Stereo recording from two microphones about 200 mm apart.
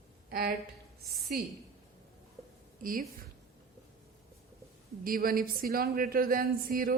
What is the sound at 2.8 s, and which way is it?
Speech, 45° right (ahead or behind).